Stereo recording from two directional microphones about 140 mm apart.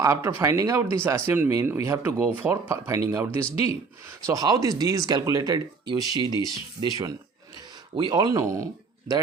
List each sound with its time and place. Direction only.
0.0 s speech: 20° right (ahead or behind)
6.1 s speech: 30° left (ahead or behind)
6.4 s speech: 25° right (ahead or behind)